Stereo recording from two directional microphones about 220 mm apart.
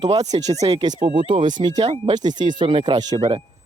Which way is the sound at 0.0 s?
20° right (ahead or behind).